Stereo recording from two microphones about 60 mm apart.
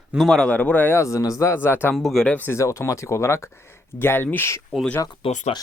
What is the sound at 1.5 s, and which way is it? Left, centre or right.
Speech, left.